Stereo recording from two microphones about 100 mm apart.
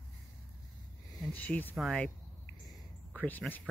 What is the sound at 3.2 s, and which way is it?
Speech, 15° left (ahead or behind).